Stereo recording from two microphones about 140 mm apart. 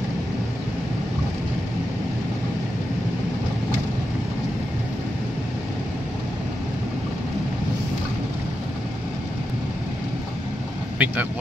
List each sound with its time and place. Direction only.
11.0 s speech: 10° right (ahead or behind)